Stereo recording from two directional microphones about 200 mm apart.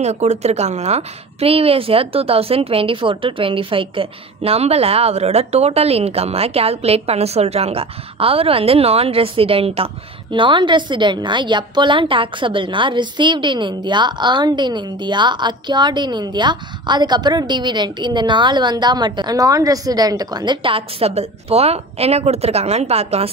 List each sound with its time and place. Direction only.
0.0 s a woman's voice: 35° right (ahead or behind)